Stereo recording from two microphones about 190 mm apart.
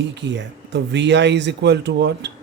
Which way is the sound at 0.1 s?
65° right (ahead or behind).